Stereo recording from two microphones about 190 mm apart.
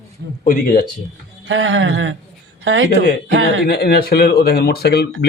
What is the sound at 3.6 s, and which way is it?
Speech, 55° left (ahead or behind).